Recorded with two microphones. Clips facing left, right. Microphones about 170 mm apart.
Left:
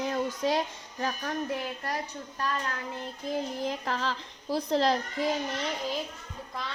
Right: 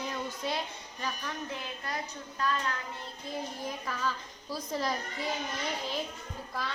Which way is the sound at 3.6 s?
75° left (ahead or behind).